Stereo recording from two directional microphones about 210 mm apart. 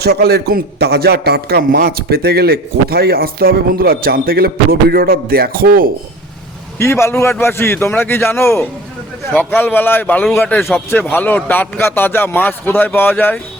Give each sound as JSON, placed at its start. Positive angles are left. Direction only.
{"t": 0.0, "sound": "a man's voice", "side_deg": -50}
{"t": 6.7, "sound": "a man's voice", "side_deg": 10}